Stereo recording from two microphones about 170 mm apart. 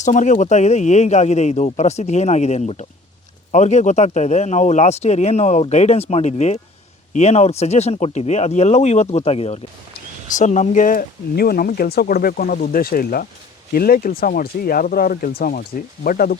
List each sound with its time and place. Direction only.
0.0 s a man's voice: 45° left (ahead or behind)